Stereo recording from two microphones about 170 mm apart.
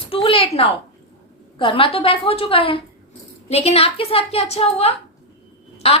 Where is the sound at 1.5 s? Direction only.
30° left (ahead or behind).